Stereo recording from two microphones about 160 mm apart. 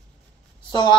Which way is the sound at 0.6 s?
30° left (ahead or behind).